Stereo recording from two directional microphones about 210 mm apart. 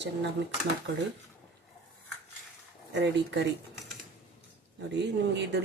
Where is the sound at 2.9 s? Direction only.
55° right (ahead or behind).